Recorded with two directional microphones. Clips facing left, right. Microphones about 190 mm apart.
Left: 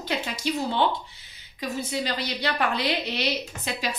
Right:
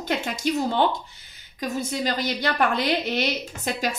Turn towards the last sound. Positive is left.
turn(degrees=-45)  # may be behind; listen again after turning